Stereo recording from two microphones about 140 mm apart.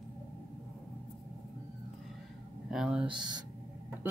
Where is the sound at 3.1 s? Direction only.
30° right (ahead or behind).